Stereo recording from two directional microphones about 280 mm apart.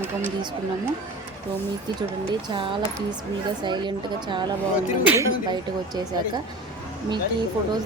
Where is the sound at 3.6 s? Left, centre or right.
Centre.